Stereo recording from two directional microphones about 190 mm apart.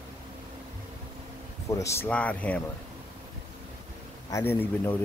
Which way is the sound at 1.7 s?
15° left (ahead or behind).